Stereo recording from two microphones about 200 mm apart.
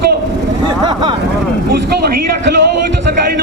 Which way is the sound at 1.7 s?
55° right (ahead or behind).